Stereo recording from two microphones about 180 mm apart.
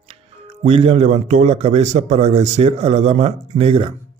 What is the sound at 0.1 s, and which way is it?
Speech, 35° right (ahead or behind).